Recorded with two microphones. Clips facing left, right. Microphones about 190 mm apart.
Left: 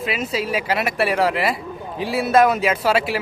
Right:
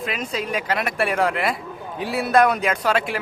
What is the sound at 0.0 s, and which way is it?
A man's voice, 5° left (ahead or behind).